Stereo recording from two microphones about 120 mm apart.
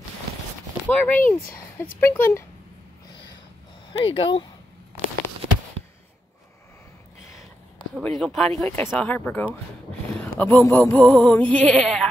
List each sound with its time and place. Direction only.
0.8 s speech: 10° left (ahead or behind)
4.0 s speech: 45° left (ahead or behind)
8.0 s speech: centre (ahead or behind)
8.6 s speech: 15° left (ahead or behind)